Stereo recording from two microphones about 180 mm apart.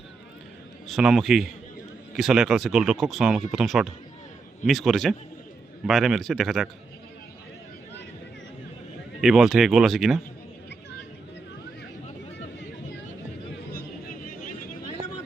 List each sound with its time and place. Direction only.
0.9 s speech: 5° right (ahead or behind)
9.2 s speech: centre (ahead or behind)
13.7 s vehicle: 50° left (ahead or behind)